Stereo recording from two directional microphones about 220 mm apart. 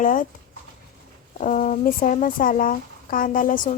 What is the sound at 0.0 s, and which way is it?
Speech, 35° left (ahead or behind).